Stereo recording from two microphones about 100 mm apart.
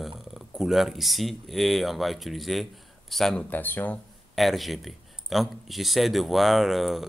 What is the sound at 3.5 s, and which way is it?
Speech, 20° left (ahead or behind).